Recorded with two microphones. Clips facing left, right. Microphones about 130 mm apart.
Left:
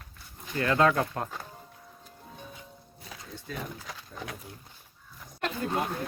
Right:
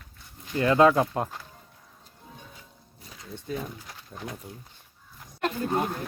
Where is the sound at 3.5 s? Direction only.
20° right (ahead or behind).